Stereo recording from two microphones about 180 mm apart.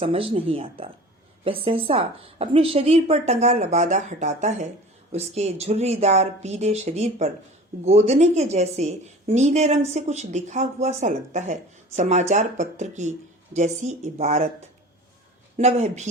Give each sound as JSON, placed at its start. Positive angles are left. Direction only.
{"t": 0.0, "sound": "a woman's voice", "side_deg": -30}
{"t": 15.5, "sound": "a woman's voice", "side_deg": -40}